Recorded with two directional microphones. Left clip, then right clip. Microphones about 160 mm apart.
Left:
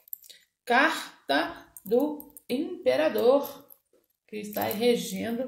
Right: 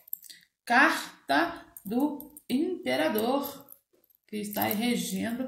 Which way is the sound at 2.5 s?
30° left (ahead or behind).